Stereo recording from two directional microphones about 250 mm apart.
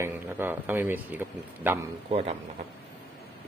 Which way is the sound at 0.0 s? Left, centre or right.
Centre.